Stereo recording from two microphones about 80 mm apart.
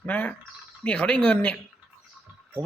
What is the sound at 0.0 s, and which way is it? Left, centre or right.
A man's voice, centre.